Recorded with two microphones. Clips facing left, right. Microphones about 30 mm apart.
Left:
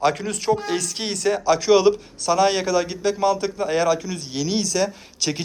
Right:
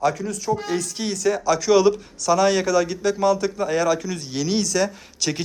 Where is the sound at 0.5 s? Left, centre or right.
Left.